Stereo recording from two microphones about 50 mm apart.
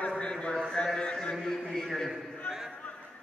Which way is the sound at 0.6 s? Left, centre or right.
Centre.